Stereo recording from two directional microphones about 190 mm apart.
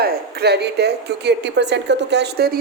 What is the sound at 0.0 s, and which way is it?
A woman's voice, 55° right (ahead or behind).